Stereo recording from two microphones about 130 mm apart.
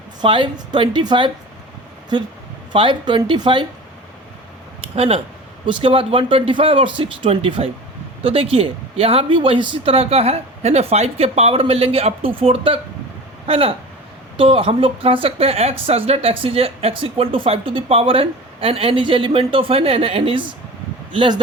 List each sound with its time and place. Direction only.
0.2 s speech: 40° right (ahead or behind)
2.7 s speech: 40° right (ahead or behind)
4.9 s a woman's voice: 50° right (ahead or behind)